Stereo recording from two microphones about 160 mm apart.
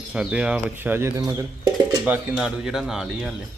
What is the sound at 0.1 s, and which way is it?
Speech, 5° right (ahead or behind).